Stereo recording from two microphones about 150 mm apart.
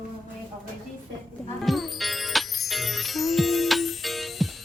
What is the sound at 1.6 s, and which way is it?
Music, centre (ahead or behind).